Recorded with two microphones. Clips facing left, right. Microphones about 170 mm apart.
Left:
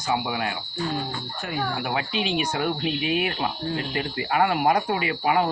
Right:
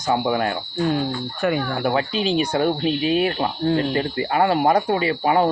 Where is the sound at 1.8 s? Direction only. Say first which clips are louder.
Right 6 dB; 35° right (ahead or behind).